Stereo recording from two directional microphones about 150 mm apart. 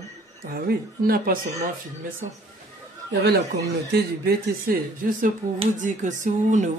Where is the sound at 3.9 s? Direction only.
80° right.